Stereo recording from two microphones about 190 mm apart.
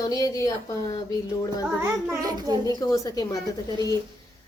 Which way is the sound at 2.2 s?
20° right (ahead or behind).